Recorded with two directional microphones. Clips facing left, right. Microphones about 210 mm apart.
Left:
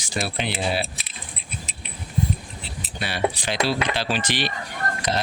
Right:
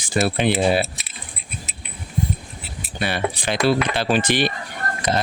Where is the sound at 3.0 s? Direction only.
55° right (ahead or behind).